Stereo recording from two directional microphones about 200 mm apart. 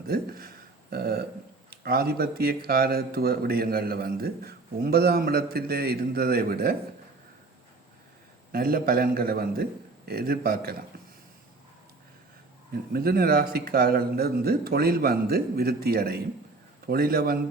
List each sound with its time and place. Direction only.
0.1 s a man's voice: 50° right (ahead or behind)
8.5 s a man's voice: 50° right (ahead or behind)
12.7 s a man's voice: 50° right (ahead or behind)